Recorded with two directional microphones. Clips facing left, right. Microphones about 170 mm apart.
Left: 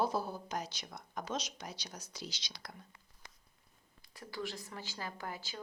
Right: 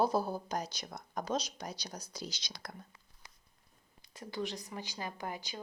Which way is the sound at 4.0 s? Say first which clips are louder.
Right 4 dB; 20° right (ahead or behind).